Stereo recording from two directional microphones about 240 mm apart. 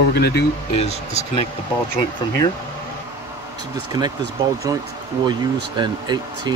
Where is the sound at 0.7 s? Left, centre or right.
Left.